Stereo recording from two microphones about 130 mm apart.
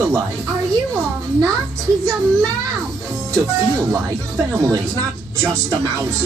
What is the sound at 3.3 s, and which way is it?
Speech, 25° right (ahead or behind).